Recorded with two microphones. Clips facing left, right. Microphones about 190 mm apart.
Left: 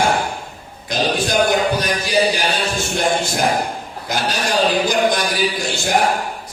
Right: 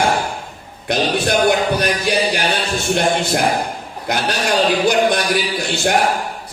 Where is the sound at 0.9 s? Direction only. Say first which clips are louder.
Right 2 dB; 65° right (ahead or behind).